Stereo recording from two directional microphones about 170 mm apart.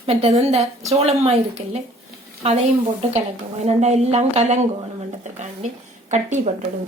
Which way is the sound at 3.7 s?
40° right (ahead or behind).